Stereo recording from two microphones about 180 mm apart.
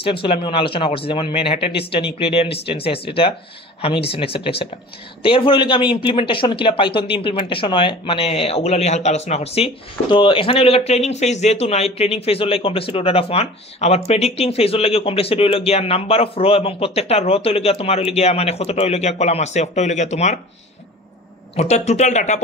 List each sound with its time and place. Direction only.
0.0 s speech: 30° left (ahead or behind)
21.5 s speech: 35° left (ahead or behind)